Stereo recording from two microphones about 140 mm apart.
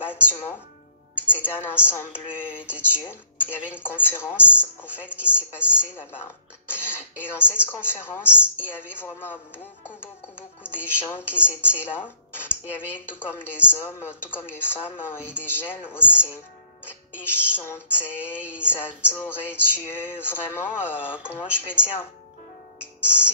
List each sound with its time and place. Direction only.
0.0 s music: 15° left (ahead or behind)
1.3 s a woman's voice: 15° left (ahead or behind)
11.0 s speech: 15° left (ahead or behind)
15.1 s speech: 10° right (ahead or behind)
15.4 s speech: 15° left (ahead or behind)
20.9 s speech: 10° right (ahead or behind)
21.5 s speech: 15° left (ahead or behind)
22.8 s music: 15° left (ahead or behind)